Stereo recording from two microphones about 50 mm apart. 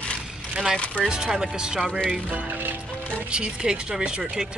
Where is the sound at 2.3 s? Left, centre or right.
Right.